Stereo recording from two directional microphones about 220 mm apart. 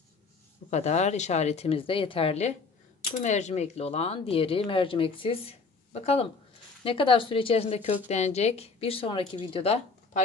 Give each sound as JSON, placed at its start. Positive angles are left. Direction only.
{"t": 0.7, "sound": "speech", "side_deg": 30}